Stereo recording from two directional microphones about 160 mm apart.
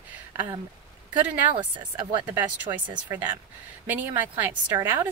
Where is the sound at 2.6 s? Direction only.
30° right (ahead or behind).